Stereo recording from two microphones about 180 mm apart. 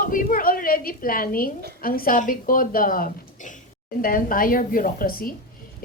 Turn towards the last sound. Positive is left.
turn(degrees=55)  # may be behind; listen again after turning